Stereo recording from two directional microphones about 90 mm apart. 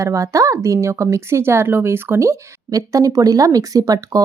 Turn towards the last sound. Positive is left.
turn(degrees=-40)  # may be behind; listen again after turning